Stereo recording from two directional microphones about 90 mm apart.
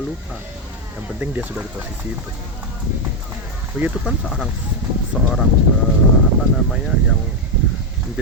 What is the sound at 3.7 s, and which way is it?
Speech, 10° right (ahead or behind).